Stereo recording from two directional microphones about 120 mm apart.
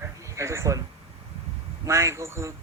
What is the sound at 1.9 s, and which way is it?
Speech, 25° right (ahead or behind).